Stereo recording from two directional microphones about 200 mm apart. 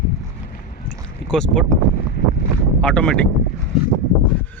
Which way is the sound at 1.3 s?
5° left (ahead or behind).